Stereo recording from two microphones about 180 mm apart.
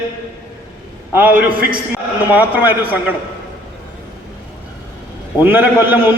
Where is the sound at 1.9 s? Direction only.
10° right (ahead or behind).